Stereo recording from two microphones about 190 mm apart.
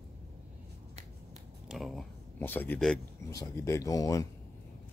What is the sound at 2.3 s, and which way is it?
Speech, 10° left (ahead or behind).